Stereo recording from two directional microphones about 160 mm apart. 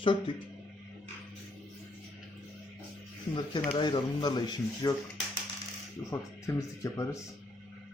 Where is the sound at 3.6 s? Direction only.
30° left (ahead or behind).